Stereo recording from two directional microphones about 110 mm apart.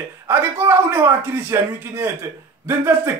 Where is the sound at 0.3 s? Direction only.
20° right (ahead or behind).